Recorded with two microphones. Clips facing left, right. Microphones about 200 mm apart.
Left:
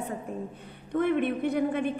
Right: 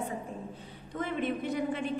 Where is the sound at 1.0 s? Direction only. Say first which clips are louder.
Left 7 dB; 60° left (ahead or behind).